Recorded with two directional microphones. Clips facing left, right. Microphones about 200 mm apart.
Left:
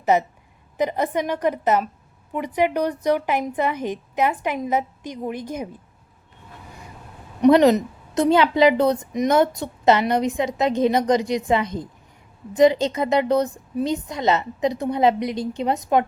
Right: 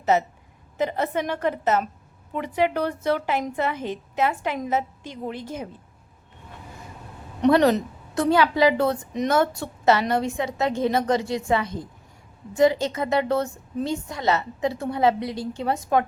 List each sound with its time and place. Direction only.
0.0 s a woman's voice: 15° left (ahead or behind)
7.4 s a woman's voice: 15° left (ahead or behind)